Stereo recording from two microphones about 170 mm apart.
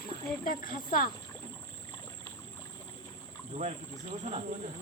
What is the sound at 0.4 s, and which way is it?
Speech, 55° left (ahead or behind).